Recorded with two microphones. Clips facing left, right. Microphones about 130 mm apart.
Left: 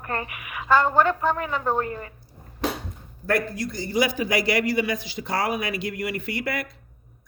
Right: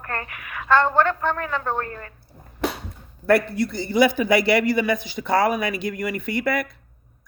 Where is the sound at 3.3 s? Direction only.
65° right (ahead or behind); by 5.8 s 50° right (ahead or behind).